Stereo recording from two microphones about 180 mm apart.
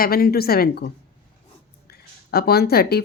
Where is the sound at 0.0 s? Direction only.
55° left (ahead or behind).